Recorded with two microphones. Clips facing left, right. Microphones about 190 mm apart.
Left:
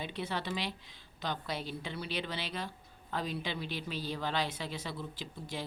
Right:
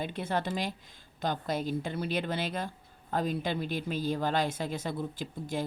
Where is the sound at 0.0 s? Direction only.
50° right (ahead or behind).